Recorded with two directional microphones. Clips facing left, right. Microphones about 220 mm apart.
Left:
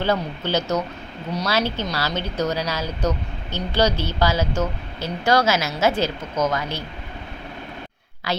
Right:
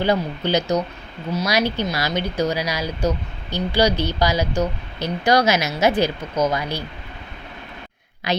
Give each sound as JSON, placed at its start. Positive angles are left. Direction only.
{"t": 0.0, "sound": "speech", "side_deg": -15}
{"t": 8.3, "sound": "a woman's voice", "side_deg": -20}